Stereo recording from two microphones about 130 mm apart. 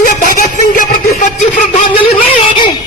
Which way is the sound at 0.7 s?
70° left (ahead or behind).